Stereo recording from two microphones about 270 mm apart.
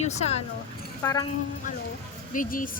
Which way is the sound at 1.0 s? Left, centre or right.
Centre.